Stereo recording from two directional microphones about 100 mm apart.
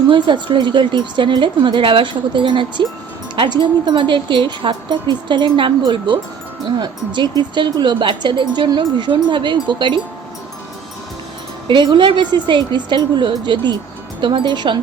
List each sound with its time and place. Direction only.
0.1 s speech: 50° right (ahead or behind)
11.7 s speech: 50° right (ahead or behind)